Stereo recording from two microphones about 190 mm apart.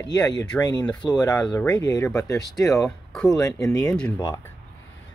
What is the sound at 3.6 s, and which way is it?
Speech, 15° left (ahead or behind).